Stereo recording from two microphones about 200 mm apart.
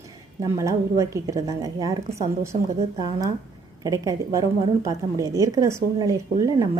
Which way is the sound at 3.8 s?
15° right (ahead or behind).